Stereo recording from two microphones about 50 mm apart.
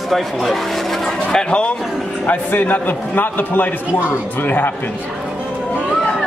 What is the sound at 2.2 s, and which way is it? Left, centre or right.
A man's voice, left.